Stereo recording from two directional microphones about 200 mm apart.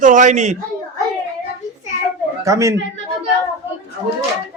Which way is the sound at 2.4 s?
15° right (ahead or behind).